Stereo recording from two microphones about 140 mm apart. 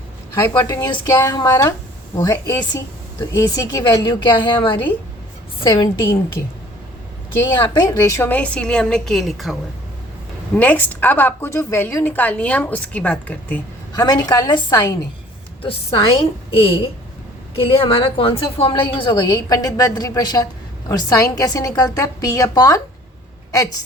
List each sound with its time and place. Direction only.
0.3 s a woman's voice: 20° left (ahead or behind)
7.5 s a woman's voice: 35° left (ahead or behind); by 9.6 s centre (ahead or behind)
10.5 s a woman's voice: 10° left (ahead or behind)
13.9 s a woman's voice: 30° left (ahead or behind)
15.6 s a woman's voice: 40° left (ahead or behind); by 23.7 s 25° left (ahead or behind)